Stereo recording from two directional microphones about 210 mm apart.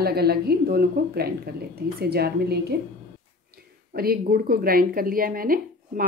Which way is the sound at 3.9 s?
45° right (ahead or behind).